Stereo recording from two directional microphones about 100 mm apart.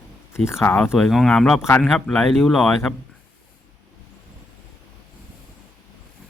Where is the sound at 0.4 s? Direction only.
25° left (ahead or behind).